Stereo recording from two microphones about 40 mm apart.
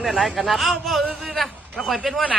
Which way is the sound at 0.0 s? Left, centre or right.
Centre.